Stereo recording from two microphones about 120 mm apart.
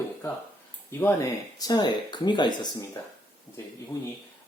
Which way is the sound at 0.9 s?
20° left (ahead or behind).